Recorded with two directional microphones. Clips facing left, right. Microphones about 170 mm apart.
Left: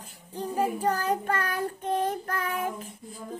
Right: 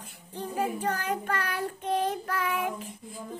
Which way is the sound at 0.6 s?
40° left (ahead or behind).